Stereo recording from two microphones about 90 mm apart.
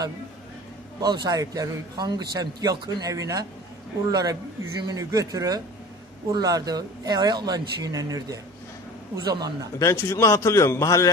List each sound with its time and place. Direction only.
1.0 s a man's voice: 50° right (ahead or behind)
9.8 s a man's voice: 35° left (ahead or behind)